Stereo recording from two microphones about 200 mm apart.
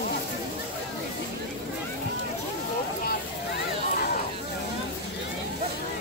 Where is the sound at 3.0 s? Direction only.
50° left (ahead or behind).